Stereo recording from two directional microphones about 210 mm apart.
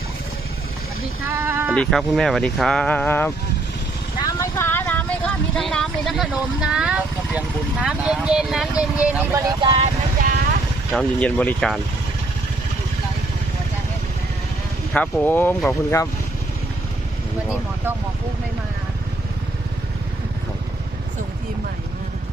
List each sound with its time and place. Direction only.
1.2 s sheep: 10° right (ahead or behind)
1.7 s speech: centre (ahead or behind)
9.5 s speech: 25° right (ahead or behind)
10.9 s speech: 5° left (ahead or behind)
14.9 s speech: 5° left (ahead or behind)